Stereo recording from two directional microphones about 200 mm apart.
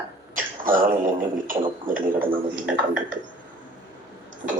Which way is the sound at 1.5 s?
45° right (ahead or behind).